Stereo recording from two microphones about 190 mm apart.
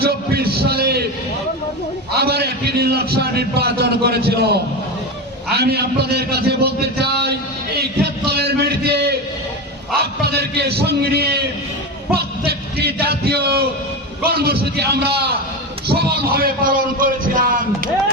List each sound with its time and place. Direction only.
0.0 s a man's voice: 55° right (ahead or behind)
2.1 s a man's voice: 55° right (ahead or behind)
12.5 s a man's voice: 55° right (ahead or behind)